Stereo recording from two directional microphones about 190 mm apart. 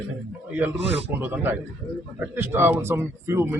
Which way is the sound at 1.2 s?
10° right (ahead or behind).